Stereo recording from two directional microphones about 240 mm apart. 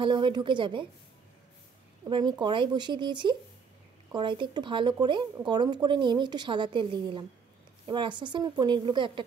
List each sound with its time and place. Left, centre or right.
0.0 s speech: centre
2.0 s speech: centre